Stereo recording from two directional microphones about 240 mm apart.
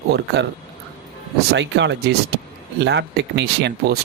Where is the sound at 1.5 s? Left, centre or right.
Right.